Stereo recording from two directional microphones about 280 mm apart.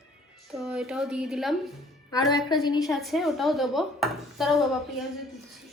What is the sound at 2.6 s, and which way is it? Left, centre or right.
Speech, centre.